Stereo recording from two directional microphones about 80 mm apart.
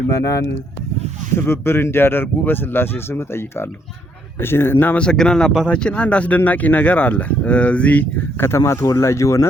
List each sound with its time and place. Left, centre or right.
0.1 s speech: left
1.5 s speech: left
4.9 s speech: centre
8.4 s speech: left